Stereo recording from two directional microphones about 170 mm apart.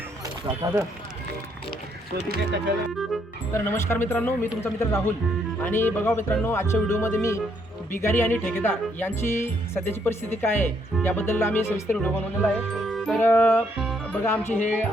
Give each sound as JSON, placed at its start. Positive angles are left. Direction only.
{"t": 0.6, "sound": "speech", "side_deg": -25}
{"t": 2.3, "sound": "speech", "side_deg": -80}
{"t": 3.5, "sound": "speech", "side_deg": 15}
{"t": 12.8, "sound": "music", "side_deg": 0}
{"t": 13.1, "sound": "speech", "side_deg": 10}
{"t": 13.7, "sound": "music", "side_deg": 0}
{"t": 14.3, "sound": "speech", "side_deg": 10}